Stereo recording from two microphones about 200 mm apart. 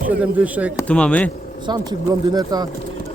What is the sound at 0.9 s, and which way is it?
Speech, 5° left (ahead or behind).